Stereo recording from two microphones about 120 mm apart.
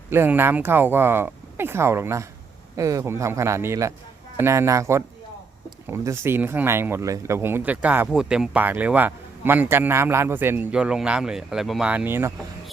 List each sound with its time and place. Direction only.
0.1 s speech: 20° right (ahead or behind); by 11.9 s centre (ahead or behind)
11.9 s speech: 15° right (ahead or behind)